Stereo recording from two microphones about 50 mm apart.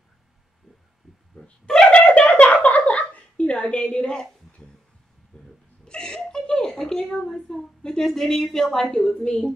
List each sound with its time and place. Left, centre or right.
1.4 s a sound: centre
3.6 s a woman's voice: left
5.3 s hiccup: centre
5.9 s a sound: centre
6.9 s a woman's voice: centre
8.9 s a woman's voice: centre